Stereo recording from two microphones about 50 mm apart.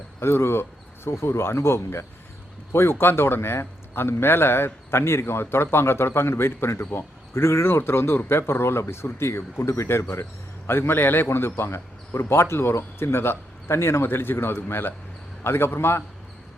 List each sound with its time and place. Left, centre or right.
0.2 s a man's voice: left
10.7 s a man's voice: left